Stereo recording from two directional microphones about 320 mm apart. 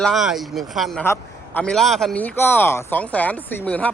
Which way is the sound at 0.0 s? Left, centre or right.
Centre.